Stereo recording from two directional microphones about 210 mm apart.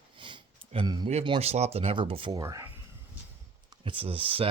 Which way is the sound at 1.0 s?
25° right (ahead or behind).